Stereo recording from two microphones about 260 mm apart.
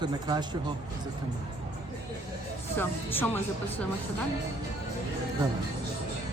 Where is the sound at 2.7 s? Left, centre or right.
Centre.